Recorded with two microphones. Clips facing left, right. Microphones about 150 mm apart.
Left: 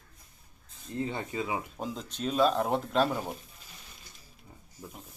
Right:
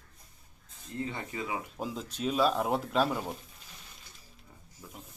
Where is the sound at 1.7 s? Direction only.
5° right (ahead or behind).